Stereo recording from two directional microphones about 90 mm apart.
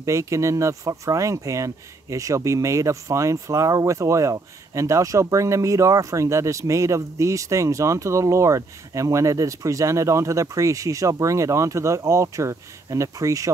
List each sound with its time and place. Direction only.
0.0 s speech: 35° right (ahead or behind)